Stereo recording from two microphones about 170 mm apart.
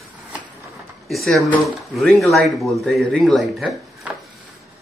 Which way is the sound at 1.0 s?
Centre (ahead or behind).